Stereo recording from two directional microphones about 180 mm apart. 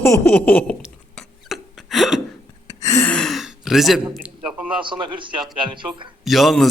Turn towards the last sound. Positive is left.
turn(degrees=0)  # may be behind; listen again after turning